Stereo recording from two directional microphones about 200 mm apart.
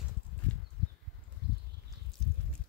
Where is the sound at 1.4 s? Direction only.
55° right (ahead or behind).